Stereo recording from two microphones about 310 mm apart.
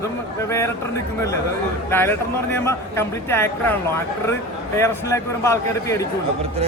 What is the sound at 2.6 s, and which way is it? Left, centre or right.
Speech, centre.